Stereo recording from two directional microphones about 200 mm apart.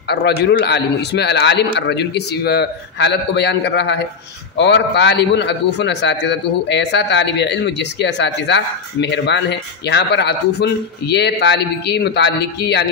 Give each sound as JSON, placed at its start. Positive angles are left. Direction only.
{"t": 0.1, "sound": "a man's voice", "side_deg": 55}